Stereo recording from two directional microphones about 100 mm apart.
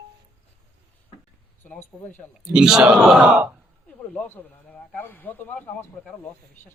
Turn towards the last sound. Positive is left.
turn(degrees=15)  # may be behind; listen again after turning